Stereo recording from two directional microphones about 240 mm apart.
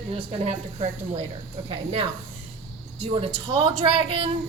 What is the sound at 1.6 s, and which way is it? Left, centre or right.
A woman's voice, right.